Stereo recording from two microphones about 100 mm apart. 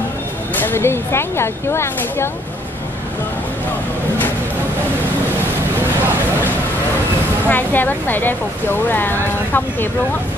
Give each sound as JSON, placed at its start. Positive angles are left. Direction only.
{"t": 0.6, "sound": "speech", "side_deg": 25}
{"t": 7.4, "sound": "speech", "side_deg": 20}